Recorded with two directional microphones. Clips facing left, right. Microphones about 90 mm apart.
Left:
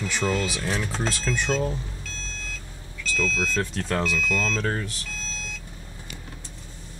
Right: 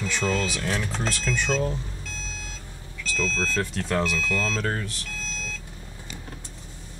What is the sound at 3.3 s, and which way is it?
Speech, centre (ahead or behind).